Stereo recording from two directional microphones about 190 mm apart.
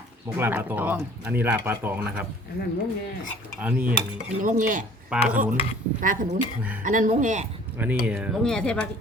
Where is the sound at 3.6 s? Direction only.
10° right (ahead or behind).